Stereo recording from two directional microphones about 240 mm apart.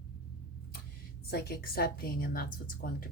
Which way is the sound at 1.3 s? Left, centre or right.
Left.